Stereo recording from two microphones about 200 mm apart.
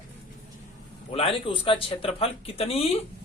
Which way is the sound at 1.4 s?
25° left (ahead or behind).